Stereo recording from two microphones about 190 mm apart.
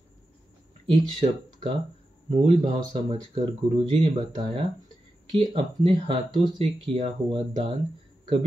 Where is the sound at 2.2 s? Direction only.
25° right (ahead or behind).